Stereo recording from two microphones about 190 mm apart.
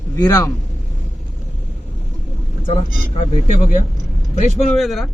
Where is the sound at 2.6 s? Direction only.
30° left (ahead or behind).